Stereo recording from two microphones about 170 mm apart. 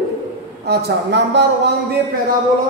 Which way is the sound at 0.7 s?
90° right.